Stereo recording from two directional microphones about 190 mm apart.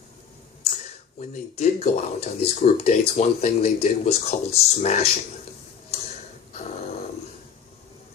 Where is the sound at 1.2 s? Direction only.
35° left (ahead or behind).